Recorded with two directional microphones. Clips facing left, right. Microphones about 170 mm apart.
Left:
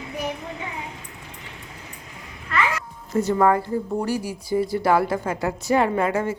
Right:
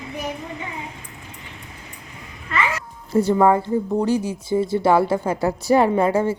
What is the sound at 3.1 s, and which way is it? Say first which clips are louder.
Speech: right 4 dB; 30° right (ahead or behind).